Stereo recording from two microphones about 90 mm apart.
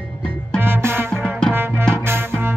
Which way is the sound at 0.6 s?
25° right (ahead or behind).